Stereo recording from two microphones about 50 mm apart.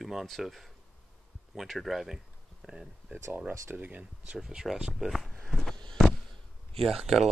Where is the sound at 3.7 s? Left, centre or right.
Right.